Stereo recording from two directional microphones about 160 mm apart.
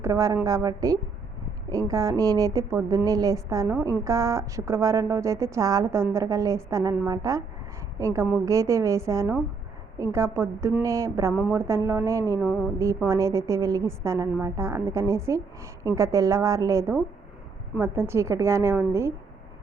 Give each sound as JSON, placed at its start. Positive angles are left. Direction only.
{"t": 0.0, "sound": "a woman's voice", "side_deg": -20}